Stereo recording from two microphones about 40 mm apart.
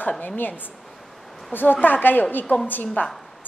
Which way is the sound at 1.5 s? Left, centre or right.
Left.